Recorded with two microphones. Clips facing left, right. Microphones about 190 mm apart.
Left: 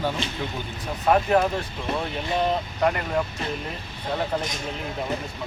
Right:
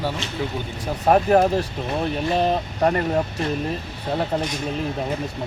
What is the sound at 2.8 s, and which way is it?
Speech, 35° right (ahead or behind).